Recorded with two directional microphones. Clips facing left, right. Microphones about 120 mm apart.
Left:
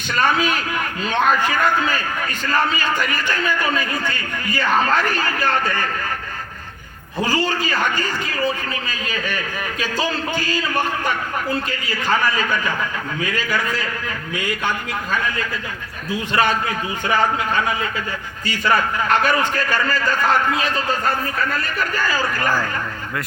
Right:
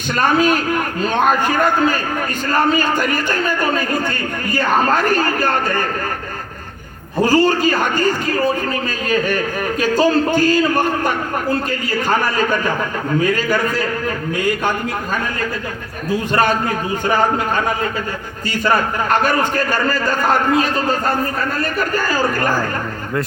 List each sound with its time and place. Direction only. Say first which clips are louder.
0.1 s a man's voice: right 4 dB; 45° right (ahead or behind)
7.2 s a man's voice: right 7 dB; 45° right (ahead or behind)